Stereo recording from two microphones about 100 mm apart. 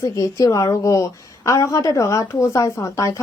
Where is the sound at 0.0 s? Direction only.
30° left (ahead or behind).